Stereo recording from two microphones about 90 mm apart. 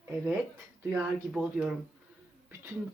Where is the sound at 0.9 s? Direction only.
10° right (ahead or behind).